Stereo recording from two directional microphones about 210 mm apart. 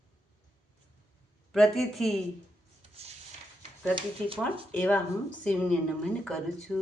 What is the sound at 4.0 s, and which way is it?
Speech, 25° right (ahead or behind).